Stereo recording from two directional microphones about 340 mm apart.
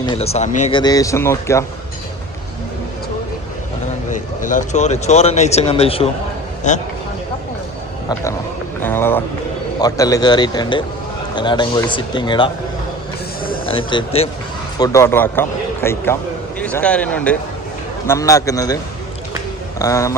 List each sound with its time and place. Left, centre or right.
0.0 s speech: centre
4.1 s speech: left
8.8 s speech: centre
13.7 s speech: centre
19.8 s speech: centre